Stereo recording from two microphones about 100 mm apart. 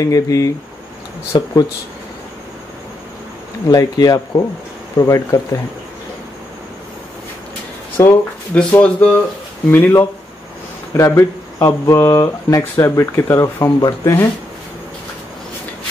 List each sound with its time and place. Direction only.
0.0 s speech: 35° left (ahead or behind)
3.6 s speech: 40° left (ahead or behind)
8.0 s a sound: 30° left (ahead or behind)
8.5 s speech: 10° left (ahead or behind); by 13.7 s 25° left (ahead or behind)
13.7 s speech: 40° left (ahead or behind)